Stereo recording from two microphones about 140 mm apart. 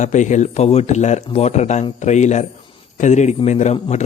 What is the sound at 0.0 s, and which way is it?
A man's voice, 60° left (ahead or behind).